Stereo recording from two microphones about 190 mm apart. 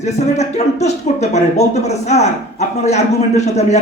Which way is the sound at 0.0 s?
35° left (ahead or behind).